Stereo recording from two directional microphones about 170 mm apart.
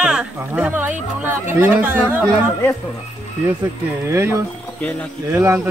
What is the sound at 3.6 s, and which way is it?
Speech, 15° right (ahead or behind).